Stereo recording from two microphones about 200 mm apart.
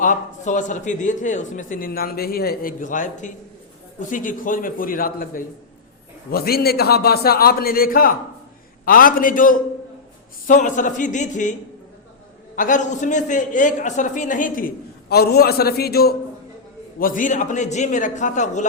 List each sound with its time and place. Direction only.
0.0 s a man's voice: 40° left (ahead or behind)
12.5 s a man's voice: 40° left (ahead or behind)